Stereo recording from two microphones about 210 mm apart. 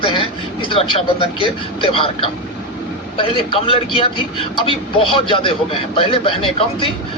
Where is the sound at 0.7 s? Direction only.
25° left (ahead or behind).